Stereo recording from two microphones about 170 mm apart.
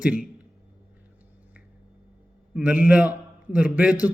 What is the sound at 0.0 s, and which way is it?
Speech, 5° right (ahead or behind).